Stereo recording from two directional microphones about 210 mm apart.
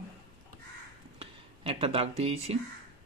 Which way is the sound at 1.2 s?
25° right (ahead or behind).